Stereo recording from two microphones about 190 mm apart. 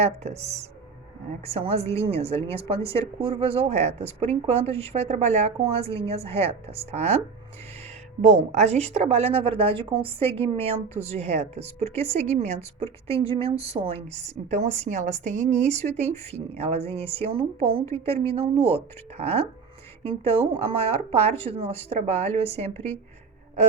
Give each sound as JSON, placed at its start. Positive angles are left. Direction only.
{"t": 0.0, "sound": "a woman's voice", "side_deg": -35}
{"t": 8.2, "sound": "a woman's voice", "side_deg": -35}
{"t": 22.7, "sound": "speech", "side_deg": 10}